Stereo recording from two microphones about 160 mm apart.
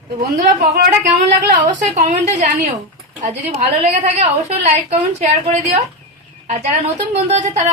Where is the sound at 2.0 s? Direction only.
50° right (ahead or behind).